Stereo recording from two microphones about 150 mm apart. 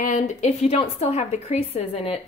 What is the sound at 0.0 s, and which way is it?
A woman's voice, 55° left (ahead or behind).